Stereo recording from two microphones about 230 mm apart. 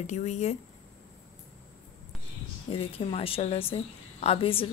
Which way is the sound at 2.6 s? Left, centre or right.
Left.